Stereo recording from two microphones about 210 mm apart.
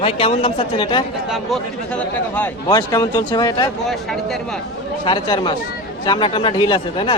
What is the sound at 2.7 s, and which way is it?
Speech, 15° left (ahead or behind).